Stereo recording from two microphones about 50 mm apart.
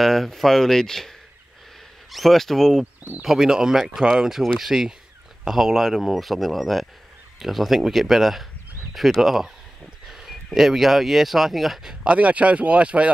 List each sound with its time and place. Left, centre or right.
0.0 s speech: centre
12.1 s speech: right